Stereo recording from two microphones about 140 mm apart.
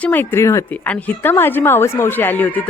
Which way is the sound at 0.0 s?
15° left (ahead or behind).